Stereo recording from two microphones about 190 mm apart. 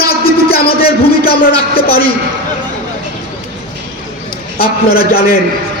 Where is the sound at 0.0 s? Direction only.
55° left (ahead or behind).